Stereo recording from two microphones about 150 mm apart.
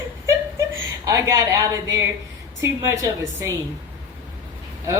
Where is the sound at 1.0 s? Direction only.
20° right (ahead or behind).